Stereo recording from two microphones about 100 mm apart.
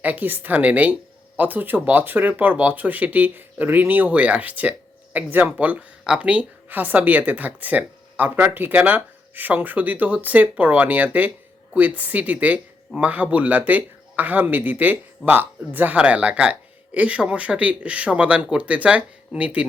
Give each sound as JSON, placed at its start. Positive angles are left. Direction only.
{"t": 0.0, "sound": "speech", "side_deg": -15}